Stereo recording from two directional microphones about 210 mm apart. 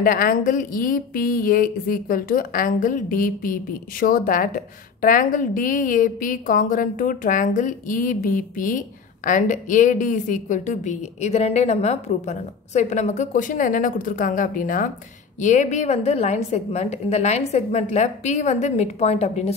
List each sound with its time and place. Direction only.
0.0 s a woman's voice: 40° left (ahead or behind)